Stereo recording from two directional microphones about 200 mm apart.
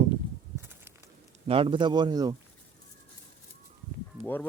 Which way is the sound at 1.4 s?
25° right (ahead or behind).